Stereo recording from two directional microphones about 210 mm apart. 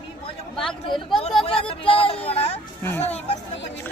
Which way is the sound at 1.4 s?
25° left (ahead or behind).